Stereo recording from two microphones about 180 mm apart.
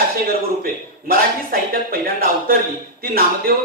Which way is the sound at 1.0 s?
55° right (ahead or behind).